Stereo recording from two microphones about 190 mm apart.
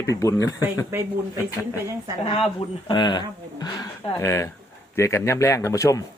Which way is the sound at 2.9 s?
25° left (ahead or behind).